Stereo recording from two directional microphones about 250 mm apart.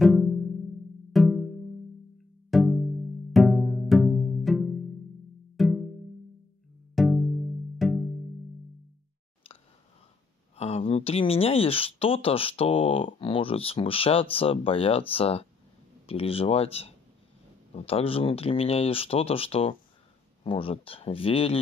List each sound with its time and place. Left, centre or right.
0.0 s music: centre
2.5 s music: centre
7.0 s music: centre
10.5 s speech: left